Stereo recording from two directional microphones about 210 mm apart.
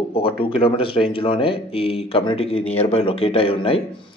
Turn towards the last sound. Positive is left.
turn(degrees=25)  # may be behind; listen again after turning